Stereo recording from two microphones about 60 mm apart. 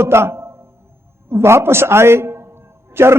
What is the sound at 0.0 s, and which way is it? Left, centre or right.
A man's voice, right.